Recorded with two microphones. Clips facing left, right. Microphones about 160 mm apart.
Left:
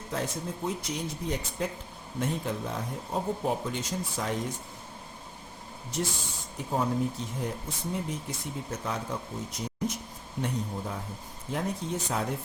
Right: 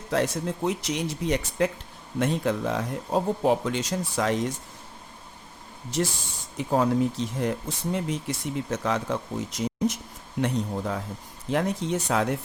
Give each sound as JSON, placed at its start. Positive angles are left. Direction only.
{"t": 0.1, "sound": "speech", "side_deg": -80}
{"t": 5.9, "sound": "speech", "side_deg": -90}
{"t": 10.4, "sound": "speech", "side_deg": -80}
{"t": 11.5, "sound": "speech", "side_deg": -90}